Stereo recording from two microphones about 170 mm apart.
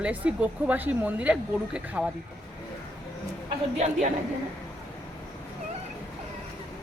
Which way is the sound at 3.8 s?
40° right (ahead or behind).